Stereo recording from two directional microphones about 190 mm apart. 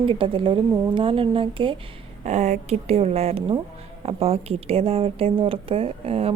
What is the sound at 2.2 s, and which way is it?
A woman's voice, 35° right (ahead or behind).